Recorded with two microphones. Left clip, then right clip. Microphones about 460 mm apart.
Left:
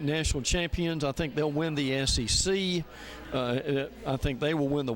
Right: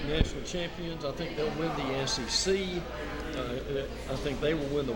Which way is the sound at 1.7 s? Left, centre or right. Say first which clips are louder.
Left 2 dB; left.